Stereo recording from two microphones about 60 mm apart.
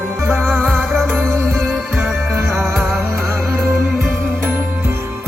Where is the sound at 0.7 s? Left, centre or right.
Centre.